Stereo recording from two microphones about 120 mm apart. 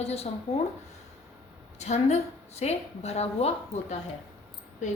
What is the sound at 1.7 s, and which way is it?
A woman's voice, 70° left (ahead or behind).